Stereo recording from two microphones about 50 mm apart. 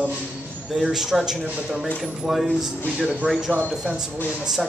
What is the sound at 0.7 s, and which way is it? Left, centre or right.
A man's voice, centre.